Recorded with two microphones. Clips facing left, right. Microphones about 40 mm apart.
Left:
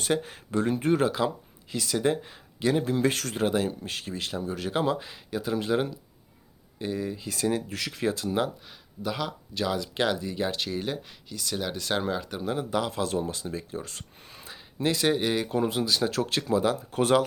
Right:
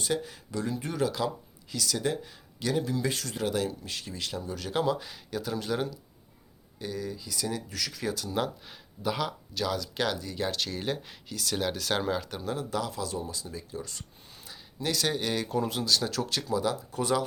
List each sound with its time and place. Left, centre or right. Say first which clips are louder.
0.0 s speech: left 3 dB; left
1.7 s speech: left 4 dB; left
3.4 s speech: left 4 dB; left
8.4 s speech: left 3 dB; centre
9.6 s speech: left 3 dB; centre
10.8 s speech: left 1 dB; centre
12.4 s speech: left 4 dB; left
12.9 s speech: left 5 dB; left
13.1 s speech: left 6 dB; left